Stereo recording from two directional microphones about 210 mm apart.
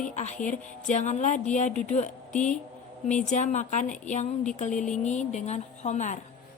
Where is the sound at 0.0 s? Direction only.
35° left (ahead or behind).